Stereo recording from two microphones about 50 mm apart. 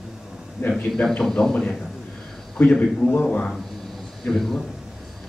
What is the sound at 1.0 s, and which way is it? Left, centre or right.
Speech, centre.